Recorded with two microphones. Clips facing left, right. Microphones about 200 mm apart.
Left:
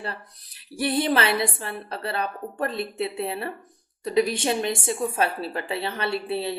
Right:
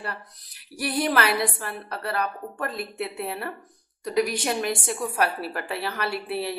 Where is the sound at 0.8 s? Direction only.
25° left (ahead or behind).